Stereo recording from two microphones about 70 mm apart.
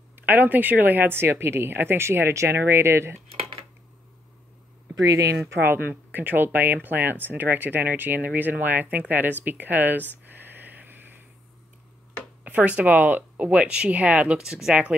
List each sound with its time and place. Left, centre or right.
0.1 s speech: right
5.0 s speech: right
5.6 s speech: right
10.3 s a sound: right
12.4 s speech: centre